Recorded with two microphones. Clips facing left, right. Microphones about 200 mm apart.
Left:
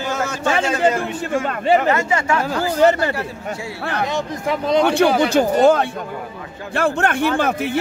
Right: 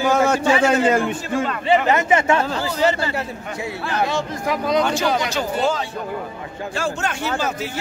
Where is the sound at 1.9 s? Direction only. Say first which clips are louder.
Right 2 dB; 20° right (ahead or behind).